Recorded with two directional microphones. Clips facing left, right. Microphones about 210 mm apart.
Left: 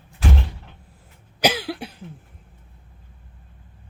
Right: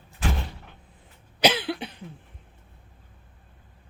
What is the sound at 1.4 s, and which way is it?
Cough, 10° left (ahead or behind).